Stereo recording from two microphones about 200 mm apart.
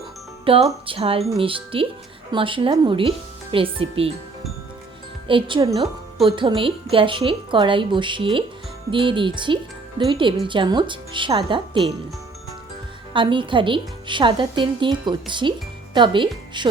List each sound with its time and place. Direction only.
0.4 s a woman's voice: 25° right (ahead or behind)
5.3 s a woman's voice: 20° right (ahead or behind)
13.1 s a woman's voice: 25° right (ahead or behind)